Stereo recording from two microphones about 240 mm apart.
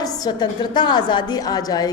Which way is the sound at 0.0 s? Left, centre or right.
Centre.